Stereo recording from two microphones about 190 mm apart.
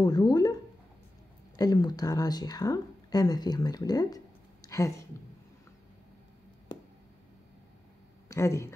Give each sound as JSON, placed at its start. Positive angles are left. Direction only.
{"t": 0.0, "sound": "speech", "side_deg": 20}
{"t": 1.6, "sound": "speech", "side_deg": 20}
{"t": 8.3, "sound": "speech", "side_deg": 15}